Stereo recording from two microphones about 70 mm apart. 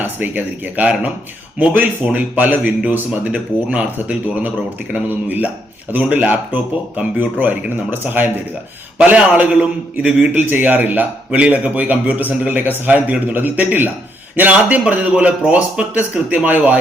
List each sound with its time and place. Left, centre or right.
0.0 s speech: right